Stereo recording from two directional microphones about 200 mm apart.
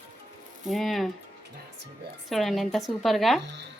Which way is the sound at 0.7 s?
Centre (ahead or behind).